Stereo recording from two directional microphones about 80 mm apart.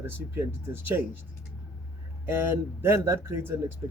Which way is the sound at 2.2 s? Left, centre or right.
Right.